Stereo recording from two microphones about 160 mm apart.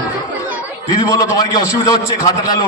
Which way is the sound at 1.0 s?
20° left (ahead or behind).